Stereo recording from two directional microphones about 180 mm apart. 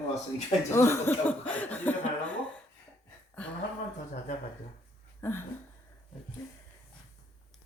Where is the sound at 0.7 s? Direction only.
15° left (ahead or behind).